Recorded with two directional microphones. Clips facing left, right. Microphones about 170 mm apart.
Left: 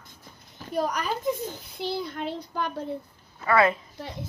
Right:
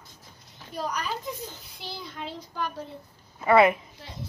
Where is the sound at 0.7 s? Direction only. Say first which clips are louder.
Left 4 dB; 50° left (ahead or behind).